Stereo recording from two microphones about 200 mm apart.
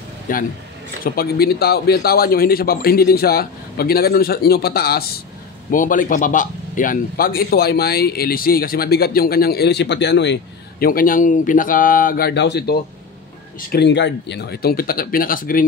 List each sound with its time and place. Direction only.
0.3 s speech: 45° left (ahead or behind)